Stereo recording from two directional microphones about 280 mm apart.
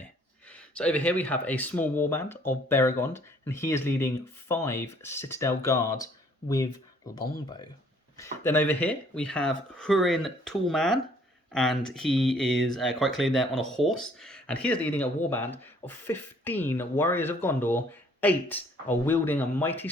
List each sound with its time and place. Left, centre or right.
0.5 s speech: centre
7.2 s speech: centre